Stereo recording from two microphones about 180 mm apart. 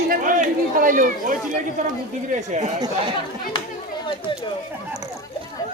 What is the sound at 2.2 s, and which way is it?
Speech, 45° right (ahead or behind).